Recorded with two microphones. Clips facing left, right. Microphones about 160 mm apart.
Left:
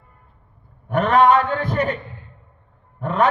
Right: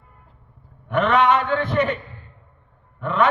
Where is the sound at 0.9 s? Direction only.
40° left (ahead or behind).